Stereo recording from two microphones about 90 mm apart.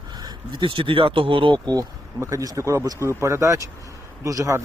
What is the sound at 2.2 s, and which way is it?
Speech, 35° right (ahead or behind).